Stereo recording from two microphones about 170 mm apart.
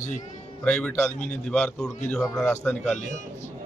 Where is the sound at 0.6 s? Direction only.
10° left (ahead or behind).